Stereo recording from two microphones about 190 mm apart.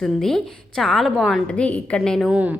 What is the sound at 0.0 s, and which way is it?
A woman's voice, centre (ahead or behind).